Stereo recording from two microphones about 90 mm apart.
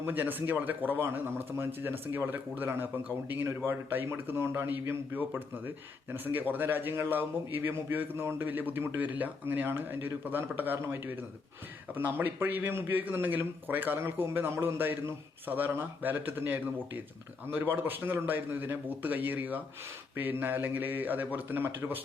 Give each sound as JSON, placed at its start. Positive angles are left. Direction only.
{"t": 0.0, "sound": "speech", "side_deg": -20}